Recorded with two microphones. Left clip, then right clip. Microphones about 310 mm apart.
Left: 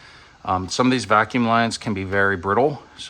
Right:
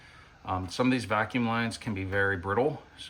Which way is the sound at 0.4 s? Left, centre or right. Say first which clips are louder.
Left 9 dB; centre.